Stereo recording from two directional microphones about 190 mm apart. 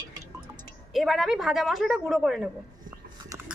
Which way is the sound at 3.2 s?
15° right (ahead or behind).